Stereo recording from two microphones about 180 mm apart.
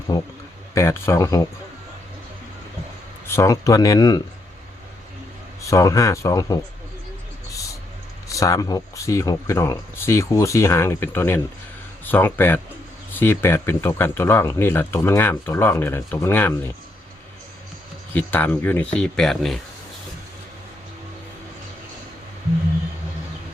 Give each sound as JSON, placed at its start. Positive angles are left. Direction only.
{"t": 0.1, "sound": "speech", "side_deg": 20}
{"t": 3.2, "sound": "speech", "side_deg": 15}
{"t": 5.6, "sound": "speech", "side_deg": 20}
{"t": 8.3, "sound": "speech", "side_deg": 20}
{"t": 18.1, "sound": "speech", "side_deg": 10}